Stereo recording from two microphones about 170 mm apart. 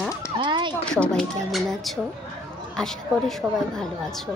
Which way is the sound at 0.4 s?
30° right (ahead or behind).